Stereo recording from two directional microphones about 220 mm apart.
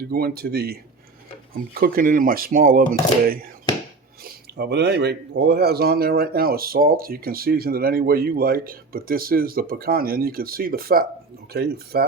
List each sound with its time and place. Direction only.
0.1 s speech: 45° right (ahead or behind)
1.8 s speech: 40° right (ahead or behind)
4.2 s speech: 45° right (ahead or behind)